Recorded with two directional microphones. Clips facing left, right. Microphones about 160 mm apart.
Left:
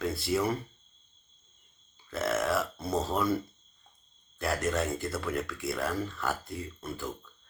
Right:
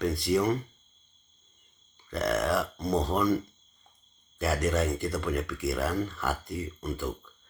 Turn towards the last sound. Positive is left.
turn(degrees=0)  # may be behind; listen again after turning